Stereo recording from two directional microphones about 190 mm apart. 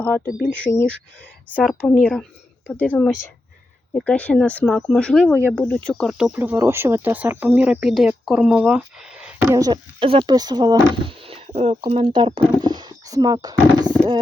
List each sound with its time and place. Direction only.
0.3 s speech: 45° left (ahead or behind)
0.5 s a woman's voice: 10° left (ahead or behind)
5.3 s speech: 10° right (ahead or behind)
5.5 s speech: 5° left (ahead or behind)
9.5 s speech: 20° right (ahead or behind)
12.5 s a sound: 20° right (ahead or behind)